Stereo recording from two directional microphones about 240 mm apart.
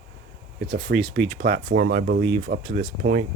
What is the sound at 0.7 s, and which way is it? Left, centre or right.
Speech, right.